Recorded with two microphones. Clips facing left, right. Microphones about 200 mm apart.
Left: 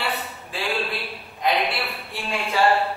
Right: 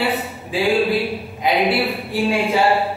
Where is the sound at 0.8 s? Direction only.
Centre (ahead or behind).